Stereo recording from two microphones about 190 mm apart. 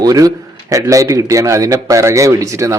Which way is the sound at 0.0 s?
20° right (ahead or behind).